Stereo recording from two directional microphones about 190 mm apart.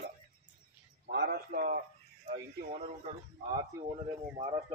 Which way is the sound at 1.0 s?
55° right (ahead or behind).